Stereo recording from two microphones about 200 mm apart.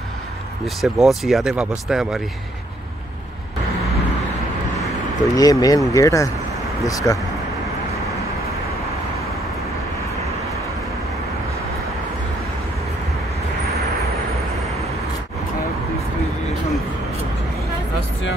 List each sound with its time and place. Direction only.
0.7 s speech: centre (ahead or behind)
4.8 s vehicle: 15° left (ahead or behind)
5.9 s speech: 15° left (ahead or behind)